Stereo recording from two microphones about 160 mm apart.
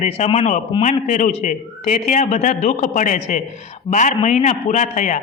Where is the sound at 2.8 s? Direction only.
55° left (ahead or behind).